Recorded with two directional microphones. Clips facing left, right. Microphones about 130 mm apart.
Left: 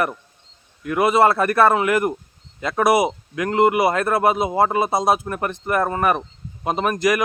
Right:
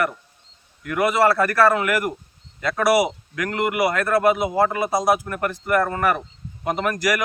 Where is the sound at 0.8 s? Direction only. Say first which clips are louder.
Left 2 dB; 25° left (ahead or behind).